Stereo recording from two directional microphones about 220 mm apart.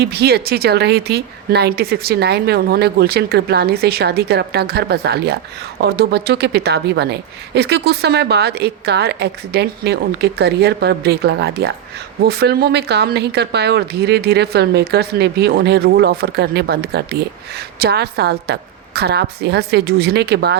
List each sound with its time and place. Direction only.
0.0 s a woman's voice: 45° right (ahead or behind)